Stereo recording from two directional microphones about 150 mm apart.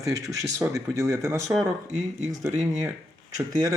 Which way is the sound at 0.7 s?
20° right (ahead or behind).